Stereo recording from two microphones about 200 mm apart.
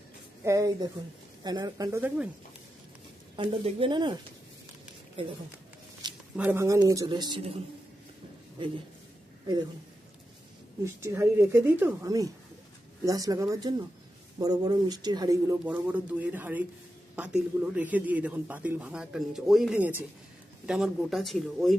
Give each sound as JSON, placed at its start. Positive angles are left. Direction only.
{"t": 0.4, "sound": "speech", "side_deg": -15}
{"t": 3.3, "sound": "a man's voice", "side_deg": -25}
{"t": 6.3, "sound": "a man's voice", "side_deg": -10}
{"t": 10.8, "sound": "speech", "side_deg": -15}